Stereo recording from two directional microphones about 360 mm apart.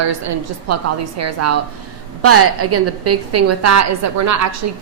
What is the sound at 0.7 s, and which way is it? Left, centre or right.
A woman's voice, right.